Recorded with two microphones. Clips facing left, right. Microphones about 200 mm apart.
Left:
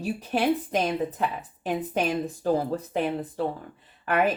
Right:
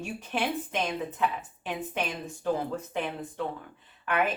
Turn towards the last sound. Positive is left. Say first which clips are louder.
# left 4 dB
turn(degrees=35)  # may be behind; listen again after turning